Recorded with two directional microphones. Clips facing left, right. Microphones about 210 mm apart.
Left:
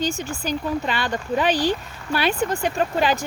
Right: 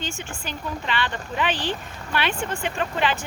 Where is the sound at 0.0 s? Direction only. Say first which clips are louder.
Left 8 dB; 40° left (ahead or behind).